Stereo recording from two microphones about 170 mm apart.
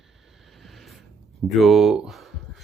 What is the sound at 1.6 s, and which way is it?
Speech, centre (ahead or behind).